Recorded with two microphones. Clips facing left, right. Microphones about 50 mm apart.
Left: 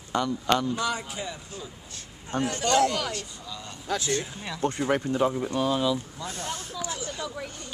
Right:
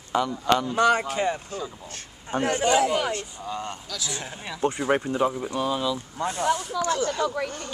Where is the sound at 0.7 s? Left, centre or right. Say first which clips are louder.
Right 9 dB; right.